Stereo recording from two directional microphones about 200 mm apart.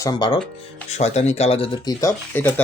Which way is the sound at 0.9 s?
35° left (ahead or behind).